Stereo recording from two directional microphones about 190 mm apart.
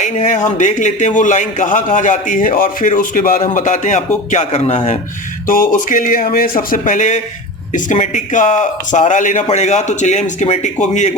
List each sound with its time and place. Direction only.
0.0 s speech: 40° left (ahead or behind)